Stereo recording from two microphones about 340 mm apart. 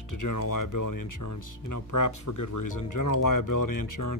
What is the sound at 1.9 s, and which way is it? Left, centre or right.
Speech, left.